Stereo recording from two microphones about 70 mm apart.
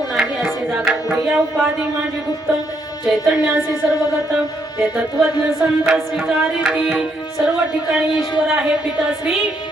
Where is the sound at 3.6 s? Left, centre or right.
Left.